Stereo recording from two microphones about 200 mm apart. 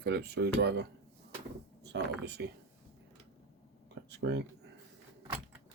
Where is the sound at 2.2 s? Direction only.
55° right (ahead or behind).